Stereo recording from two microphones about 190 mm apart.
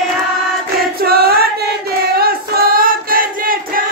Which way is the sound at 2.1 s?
55° right (ahead or behind).